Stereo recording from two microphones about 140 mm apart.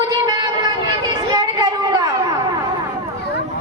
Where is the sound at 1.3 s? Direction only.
30° right (ahead or behind).